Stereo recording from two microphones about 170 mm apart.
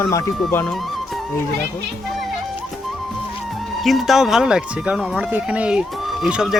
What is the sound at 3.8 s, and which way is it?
Speech, centre (ahead or behind).